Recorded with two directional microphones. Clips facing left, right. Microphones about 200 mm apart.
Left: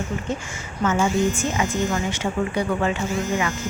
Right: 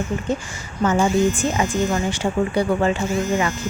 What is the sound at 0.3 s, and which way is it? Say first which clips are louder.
Speech: right 4 dB; 35° right (ahead or behind).